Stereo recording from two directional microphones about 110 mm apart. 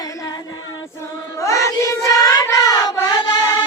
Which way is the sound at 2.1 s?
30° left (ahead or behind).